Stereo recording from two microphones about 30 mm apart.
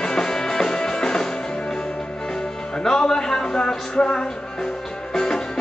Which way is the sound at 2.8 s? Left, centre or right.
Left.